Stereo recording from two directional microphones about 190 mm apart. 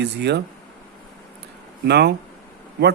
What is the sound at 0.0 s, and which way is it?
Speech, 60° right (ahead or behind).